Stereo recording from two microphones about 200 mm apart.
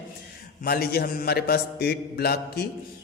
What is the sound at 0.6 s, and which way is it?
A man's voice, 50° left (ahead or behind).